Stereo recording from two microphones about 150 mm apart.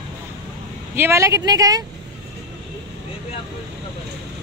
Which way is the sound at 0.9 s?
15° right (ahead or behind).